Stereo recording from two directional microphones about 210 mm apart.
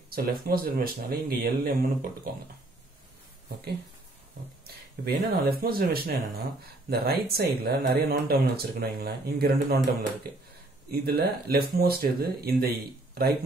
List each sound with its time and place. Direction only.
0.1 s speech: 45° right (ahead or behind)
4.6 s speech: 50° right (ahead or behind)
10.9 s speech: 50° right (ahead or behind)